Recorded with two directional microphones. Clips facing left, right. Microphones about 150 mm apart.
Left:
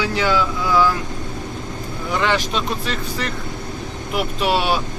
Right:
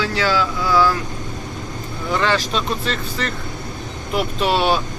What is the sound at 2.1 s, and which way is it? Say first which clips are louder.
Speech: even; 15° left (ahead or behind).